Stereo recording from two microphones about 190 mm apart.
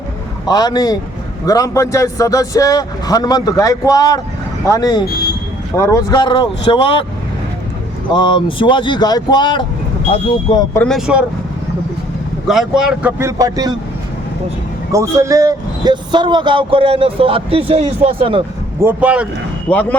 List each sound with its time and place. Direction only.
0.4 s a man's voice: 20° left (ahead or behind)
8.1 s speech: 25° left (ahead or behind)
10.8 s speech: centre (ahead or behind)
12.5 s speech: 5° right (ahead or behind); by 13.7 s 20° right (ahead or behind)
14.9 s a man's voice: 15° right (ahead or behind)
18.8 s speech: 10° right (ahead or behind)
19.7 s a man's voice: 10° left (ahead or behind)